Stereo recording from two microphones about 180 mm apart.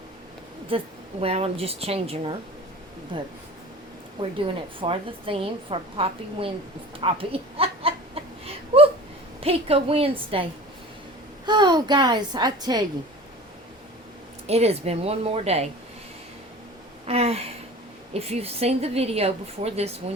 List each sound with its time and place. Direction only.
0.7 s a woman's voice: 30° right (ahead or behind)
7.0 s a sound: 30° right (ahead or behind)
9.4 s a woman's voice: 35° right (ahead or behind)
11.4 s a woman's voice: 25° right (ahead or behind)
14.4 s a woman's voice: 35° right (ahead or behind)
17.1 s a woman's voice: 35° right (ahead or behind)